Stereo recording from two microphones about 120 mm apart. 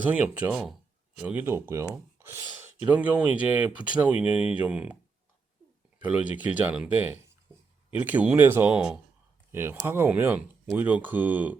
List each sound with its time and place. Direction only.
0.1 s speech: 15° right (ahead or behind)
2.1 s a sound: 20° right (ahead or behind)
2.8 s speech: 10° right (ahead or behind)
6.2 s speech: 10° right (ahead or behind)
9.5 s speech: 20° right (ahead or behind)